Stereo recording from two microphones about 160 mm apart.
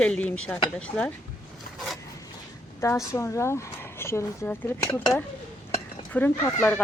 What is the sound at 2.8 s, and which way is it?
Speech, 20° left (ahead or behind).